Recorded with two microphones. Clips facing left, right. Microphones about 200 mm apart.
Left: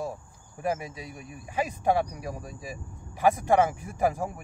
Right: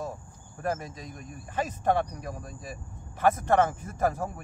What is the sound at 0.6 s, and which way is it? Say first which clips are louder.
Speech: left 1 dB; 10° left (ahead or behind).